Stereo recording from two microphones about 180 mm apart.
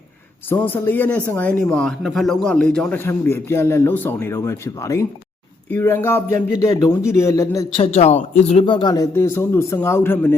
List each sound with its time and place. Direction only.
0.5 s speech: 10° left (ahead or behind)
7.8 s speech: 35° left (ahead or behind); by 10.3 s 10° left (ahead or behind)